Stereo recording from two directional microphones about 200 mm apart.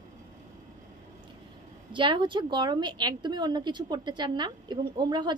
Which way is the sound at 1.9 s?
25° right (ahead or behind).